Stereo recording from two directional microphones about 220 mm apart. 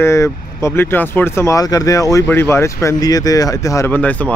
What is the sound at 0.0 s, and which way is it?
Speech, 15° left (ahead or behind).